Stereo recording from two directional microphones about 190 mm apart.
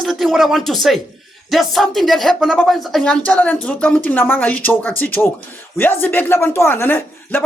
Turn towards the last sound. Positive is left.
turn(degrees=10)  # may be behind; listen again after turning